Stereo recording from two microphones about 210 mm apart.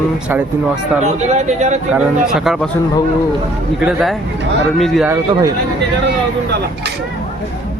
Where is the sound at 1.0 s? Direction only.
35° right (ahead or behind).